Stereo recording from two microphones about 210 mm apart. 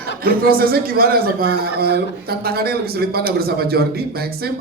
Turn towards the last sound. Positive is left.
turn(degrees=-45)  # may be behind; listen again after turning